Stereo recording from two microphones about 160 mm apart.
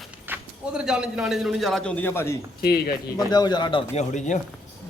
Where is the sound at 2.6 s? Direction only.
70° left (ahead or behind).